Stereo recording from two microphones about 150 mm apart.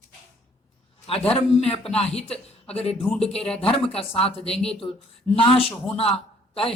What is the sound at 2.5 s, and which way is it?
Speech, 45° left (ahead or behind).